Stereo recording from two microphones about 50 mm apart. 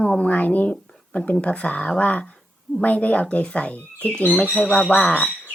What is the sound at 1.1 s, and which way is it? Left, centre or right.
Speech, left.